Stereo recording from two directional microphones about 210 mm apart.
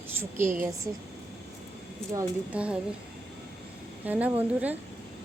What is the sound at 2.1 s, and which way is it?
Speech, 10° right (ahead or behind).